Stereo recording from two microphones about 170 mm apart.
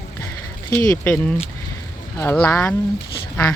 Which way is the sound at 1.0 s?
5° left (ahead or behind).